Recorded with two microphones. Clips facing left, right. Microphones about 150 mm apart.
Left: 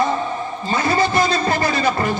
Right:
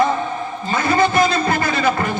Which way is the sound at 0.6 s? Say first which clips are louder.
Right 2 dB; 35° left (ahead or behind).